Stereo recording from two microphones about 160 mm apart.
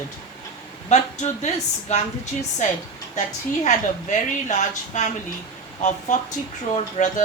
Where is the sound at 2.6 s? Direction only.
50° left (ahead or behind).